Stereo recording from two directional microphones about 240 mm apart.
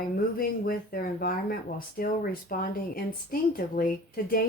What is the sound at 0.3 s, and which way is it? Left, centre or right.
Speech, left.